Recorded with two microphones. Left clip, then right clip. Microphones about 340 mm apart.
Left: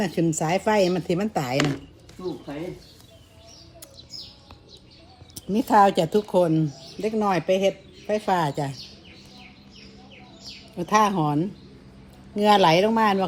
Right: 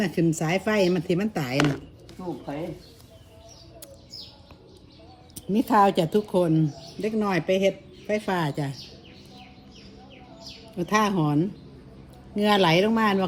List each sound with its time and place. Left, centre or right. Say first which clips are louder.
0.0 s a woman's voice: left 1 dB; centre
1.5 s speech: right 2 dB; centre
5.3 s a woman's voice: left 2 dB; centre
10.8 s a woman's voice: left 3 dB; centre